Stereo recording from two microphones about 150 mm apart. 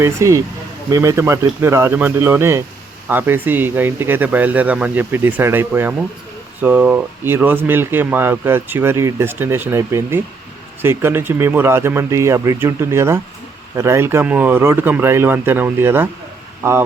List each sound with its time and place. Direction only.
0.0 s speech: 20° right (ahead or behind)